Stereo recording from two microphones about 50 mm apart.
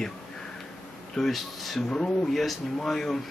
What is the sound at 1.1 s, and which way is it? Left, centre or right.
Speech, centre.